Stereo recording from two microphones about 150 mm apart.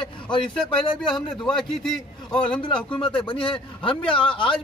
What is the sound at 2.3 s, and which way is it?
Speech, 5° left (ahead or behind).